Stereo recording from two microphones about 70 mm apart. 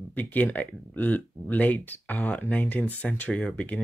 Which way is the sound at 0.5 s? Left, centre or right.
Left.